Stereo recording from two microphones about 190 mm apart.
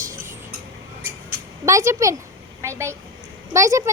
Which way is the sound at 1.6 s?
15° right (ahead or behind).